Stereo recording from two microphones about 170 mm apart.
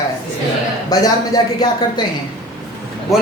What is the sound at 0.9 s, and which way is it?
Speech, 20° left (ahead or behind).